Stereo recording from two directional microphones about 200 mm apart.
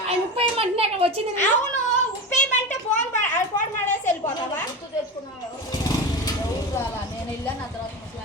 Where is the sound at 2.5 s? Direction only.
35° left (ahead or behind).